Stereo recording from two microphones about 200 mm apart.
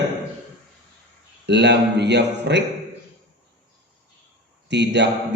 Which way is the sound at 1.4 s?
60° right (ahead or behind).